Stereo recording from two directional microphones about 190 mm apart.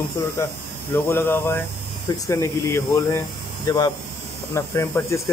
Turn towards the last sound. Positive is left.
turn(degrees=15)  # may be behind; listen again after turning